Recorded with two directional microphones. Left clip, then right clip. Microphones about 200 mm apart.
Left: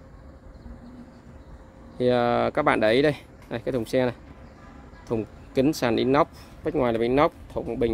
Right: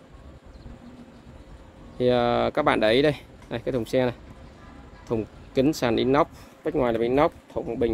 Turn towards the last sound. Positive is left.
turn(degrees=0)  # may be behind; listen again after turning